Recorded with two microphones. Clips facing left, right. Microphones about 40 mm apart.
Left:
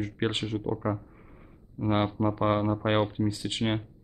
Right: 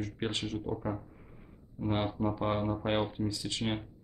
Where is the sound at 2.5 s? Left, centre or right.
Centre.